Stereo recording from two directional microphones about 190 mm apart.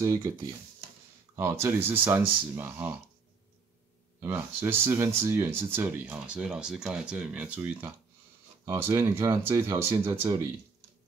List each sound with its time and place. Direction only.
0.0 s speech: 15° right (ahead or behind)
4.2 s speech: 10° right (ahead or behind)